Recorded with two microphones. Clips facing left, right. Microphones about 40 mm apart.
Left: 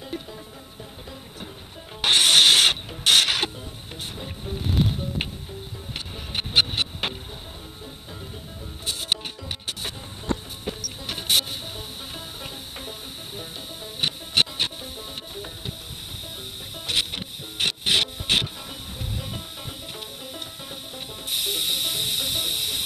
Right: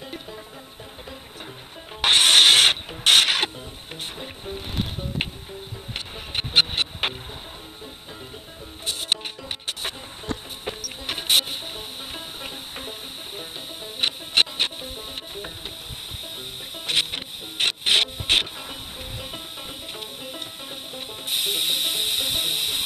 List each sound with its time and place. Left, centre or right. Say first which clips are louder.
0.0 s music: left 2 dB; centre
2.0 s mechanisms: right 1 dB; centre
5.9 s music: right 1 dB; centre
9.4 s music: right 1 dB; centre
16.8 s music: right 2 dB; centre